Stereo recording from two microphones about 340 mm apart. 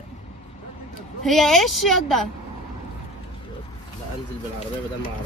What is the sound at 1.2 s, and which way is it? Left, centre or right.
Speech, centre.